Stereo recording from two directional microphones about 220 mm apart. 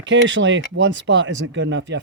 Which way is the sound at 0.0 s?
55° right (ahead or behind).